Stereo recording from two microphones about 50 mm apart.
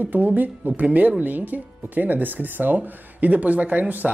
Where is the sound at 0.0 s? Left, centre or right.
Right.